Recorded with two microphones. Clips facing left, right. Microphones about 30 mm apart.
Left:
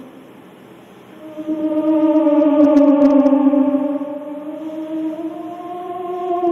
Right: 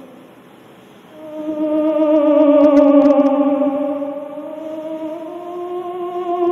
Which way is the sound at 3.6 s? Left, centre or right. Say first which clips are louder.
Even; right.